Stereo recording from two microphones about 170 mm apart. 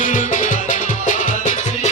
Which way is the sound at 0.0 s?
50° left (ahead or behind).